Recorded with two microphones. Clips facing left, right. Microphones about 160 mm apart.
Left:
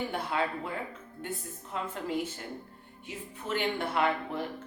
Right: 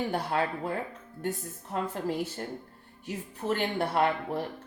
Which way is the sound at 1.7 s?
45° right (ahead or behind).